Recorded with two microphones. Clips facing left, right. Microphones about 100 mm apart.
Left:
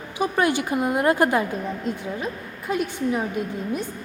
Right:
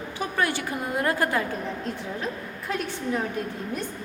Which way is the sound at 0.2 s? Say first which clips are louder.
Left 6 dB; 15° left (ahead or behind).